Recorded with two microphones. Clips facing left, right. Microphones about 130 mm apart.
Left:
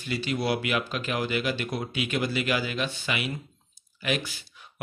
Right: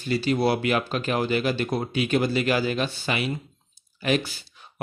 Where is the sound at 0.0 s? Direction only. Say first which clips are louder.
Right 6 dB; 35° right (ahead or behind).